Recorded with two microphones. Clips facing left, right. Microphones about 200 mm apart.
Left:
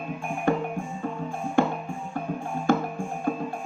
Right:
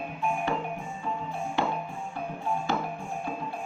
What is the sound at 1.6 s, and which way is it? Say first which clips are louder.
Music: left 7 dB; 50° left (ahead or behind).